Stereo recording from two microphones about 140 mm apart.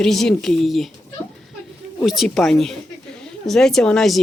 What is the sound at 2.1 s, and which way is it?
Speech, centre (ahead or behind).